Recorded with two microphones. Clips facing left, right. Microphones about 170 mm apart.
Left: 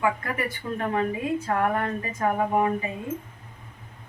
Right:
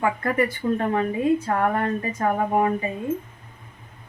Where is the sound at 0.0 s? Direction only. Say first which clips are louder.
Right 4 dB; 35° right (ahead or behind).